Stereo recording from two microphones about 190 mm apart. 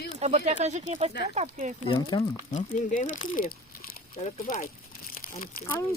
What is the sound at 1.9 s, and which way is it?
Speech, 20° left (ahead or behind).